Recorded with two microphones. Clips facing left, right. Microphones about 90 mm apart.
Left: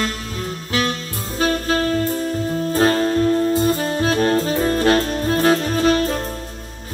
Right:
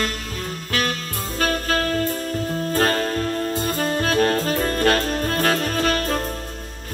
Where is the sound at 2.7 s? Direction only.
20° left (ahead or behind).